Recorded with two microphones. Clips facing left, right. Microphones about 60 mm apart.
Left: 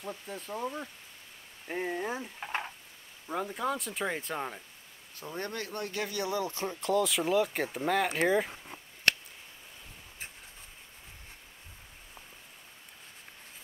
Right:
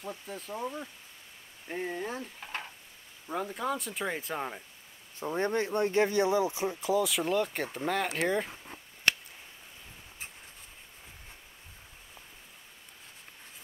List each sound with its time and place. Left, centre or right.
0.3 s speech: centre
1.7 s speech: centre
2.4 s stir: left
3.3 s speech: centre
5.2 s speech: right; by 8.5 s centre